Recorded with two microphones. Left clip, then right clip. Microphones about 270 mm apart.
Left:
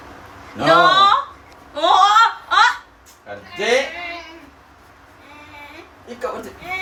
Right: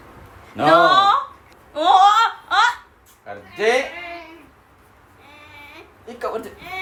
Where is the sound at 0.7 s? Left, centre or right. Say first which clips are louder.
Left 1 dB; centre.